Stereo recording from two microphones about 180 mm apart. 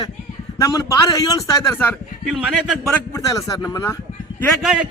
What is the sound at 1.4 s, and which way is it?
A man's voice, 5° left (ahead or behind).